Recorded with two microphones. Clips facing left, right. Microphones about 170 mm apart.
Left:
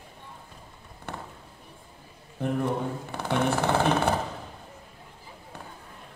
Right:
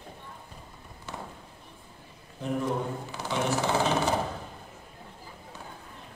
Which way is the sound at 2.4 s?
60° left (ahead or behind).